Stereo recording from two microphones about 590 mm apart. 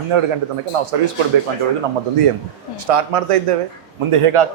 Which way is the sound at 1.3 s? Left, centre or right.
Right.